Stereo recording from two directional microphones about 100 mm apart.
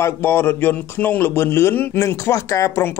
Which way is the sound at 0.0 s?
20° left (ahead or behind).